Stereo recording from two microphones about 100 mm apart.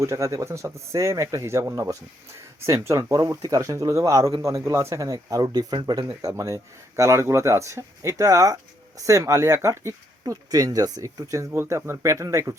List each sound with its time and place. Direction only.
0.0 s speech: 30° right (ahead or behind)
6.3 s speech: 30° right (ahead or behind)